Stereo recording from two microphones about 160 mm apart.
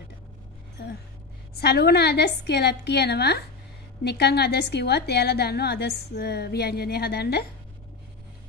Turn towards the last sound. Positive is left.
turn(degrees=85)